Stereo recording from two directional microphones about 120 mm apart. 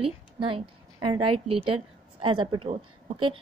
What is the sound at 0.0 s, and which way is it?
A woman's voice, 50° right (ahead or behind).